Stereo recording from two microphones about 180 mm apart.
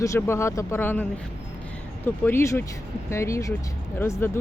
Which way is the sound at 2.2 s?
15° left (ahead or behind).